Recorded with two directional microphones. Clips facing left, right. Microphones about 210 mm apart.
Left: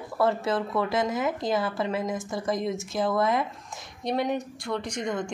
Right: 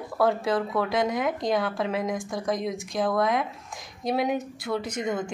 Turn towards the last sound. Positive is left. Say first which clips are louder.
# right 1 dB
turn(degrees=-5)  # may be behind; listen again after turning